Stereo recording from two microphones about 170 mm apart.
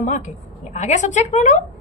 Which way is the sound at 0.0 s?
45° left (ahead or behind).